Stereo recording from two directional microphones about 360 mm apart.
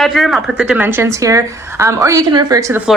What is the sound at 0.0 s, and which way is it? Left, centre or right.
A woman's voice, centre.